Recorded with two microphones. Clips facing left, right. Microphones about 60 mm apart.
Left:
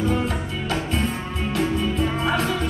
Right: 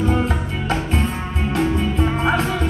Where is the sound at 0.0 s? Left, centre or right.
Right.